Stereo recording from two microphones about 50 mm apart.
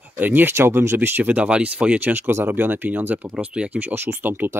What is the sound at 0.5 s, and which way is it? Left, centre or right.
Speech, right.